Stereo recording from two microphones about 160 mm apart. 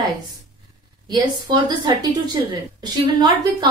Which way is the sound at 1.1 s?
25° right (ahead or behind).